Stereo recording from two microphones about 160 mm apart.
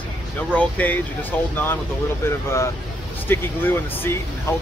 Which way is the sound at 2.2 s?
15° left (ahead or behind).